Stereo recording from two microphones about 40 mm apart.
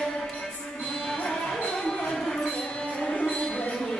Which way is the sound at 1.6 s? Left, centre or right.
Left.